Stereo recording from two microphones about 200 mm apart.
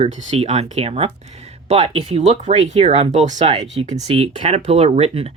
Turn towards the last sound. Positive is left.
turn(degrees=-30)  # may be behind; listen again after turning